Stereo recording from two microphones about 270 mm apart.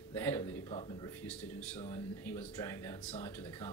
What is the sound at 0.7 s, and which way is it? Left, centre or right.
Speech, centre.